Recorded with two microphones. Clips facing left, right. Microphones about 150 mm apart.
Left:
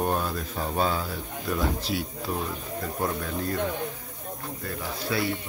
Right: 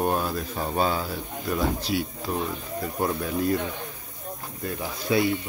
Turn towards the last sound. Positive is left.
turn(degrees=-20)  # may be behind; listen again after turning